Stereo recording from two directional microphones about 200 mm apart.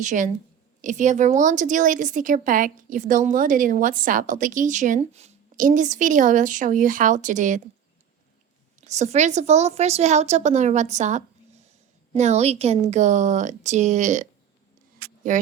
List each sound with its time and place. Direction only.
0.0 s speech: 40° right (ahead or behind)
8.9 s speech: 35° right (ahead or behind)
15.3 s speech: 40° right (ahead or behind)